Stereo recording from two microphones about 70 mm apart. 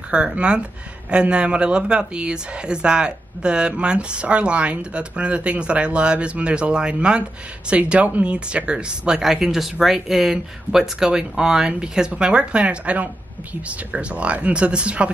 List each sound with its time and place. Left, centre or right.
0.1 s speech: centre